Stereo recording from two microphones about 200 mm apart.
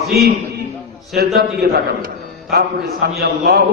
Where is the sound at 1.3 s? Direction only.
50° right (ahead or behind).